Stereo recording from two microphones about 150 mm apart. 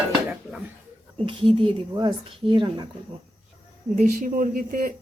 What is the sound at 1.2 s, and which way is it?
Speech, 35° right (ahead or behind).